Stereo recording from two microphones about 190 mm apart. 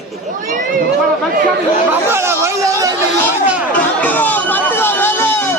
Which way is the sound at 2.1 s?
15° right (ahead or behind).